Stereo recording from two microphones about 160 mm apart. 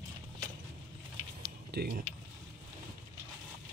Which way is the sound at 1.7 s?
80° right.